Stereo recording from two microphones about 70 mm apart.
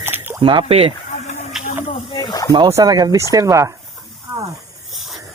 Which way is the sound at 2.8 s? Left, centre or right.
Right.